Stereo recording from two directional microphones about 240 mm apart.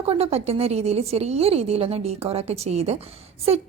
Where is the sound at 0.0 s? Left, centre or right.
Right.